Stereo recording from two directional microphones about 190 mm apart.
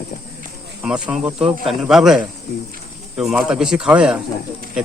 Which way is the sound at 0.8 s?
5° right (ahead or behind).